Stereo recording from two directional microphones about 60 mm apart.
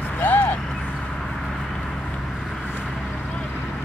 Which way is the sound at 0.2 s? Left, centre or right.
Left.